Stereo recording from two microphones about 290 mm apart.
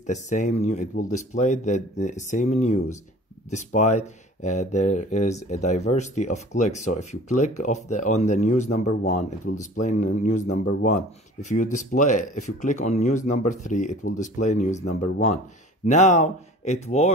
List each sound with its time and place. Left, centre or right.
0.0 s speech: left